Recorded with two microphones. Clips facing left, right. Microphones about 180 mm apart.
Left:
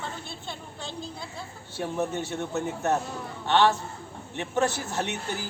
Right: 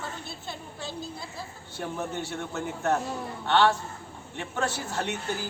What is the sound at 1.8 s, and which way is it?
A man's voice, 20° left (ahead or behind).